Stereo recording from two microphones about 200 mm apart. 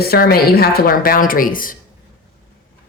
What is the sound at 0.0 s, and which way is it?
Speech, 50° left (ahead or behind).